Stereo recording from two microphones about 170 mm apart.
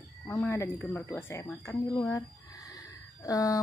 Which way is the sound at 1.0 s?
15° left (ahead or behind).